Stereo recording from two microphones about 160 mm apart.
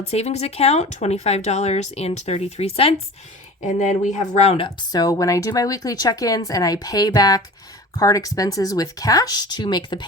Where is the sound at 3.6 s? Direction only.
50° left (ahead or behind).